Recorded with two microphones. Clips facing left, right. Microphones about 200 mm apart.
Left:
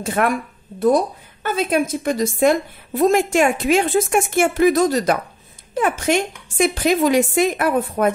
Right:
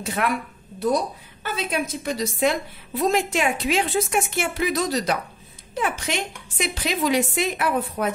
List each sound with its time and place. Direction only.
0.0 s a woman's voice: 50° left (ahead or behind)